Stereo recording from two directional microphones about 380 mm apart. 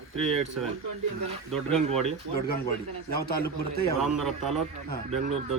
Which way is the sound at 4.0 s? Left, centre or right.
Centre.